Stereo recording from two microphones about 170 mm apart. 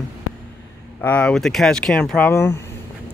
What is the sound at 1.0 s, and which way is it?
Speech, 5° left (ahead or behind).